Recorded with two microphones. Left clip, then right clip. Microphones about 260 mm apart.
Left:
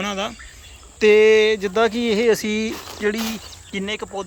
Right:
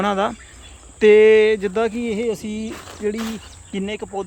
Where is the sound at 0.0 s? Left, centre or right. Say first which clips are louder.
Right 5 dB; centre.